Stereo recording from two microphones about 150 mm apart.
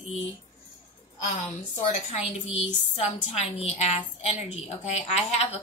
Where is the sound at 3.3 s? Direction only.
45° left (ahead or behind).